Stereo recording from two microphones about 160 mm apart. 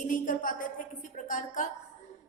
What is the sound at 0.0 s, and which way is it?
Music, 55° left (ahead or behind).